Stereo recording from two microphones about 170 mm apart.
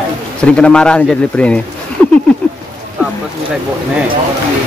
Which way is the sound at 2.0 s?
10° left (ahead or behind).